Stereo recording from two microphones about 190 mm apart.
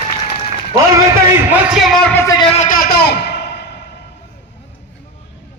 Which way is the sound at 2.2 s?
20° left (ahead or behind).